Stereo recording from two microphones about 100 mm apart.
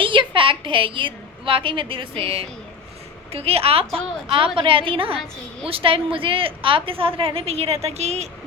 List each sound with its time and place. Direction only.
0.0 s a woman's voice: 60° right (ahead or behind)
3.3 s a woman's voice: 85° right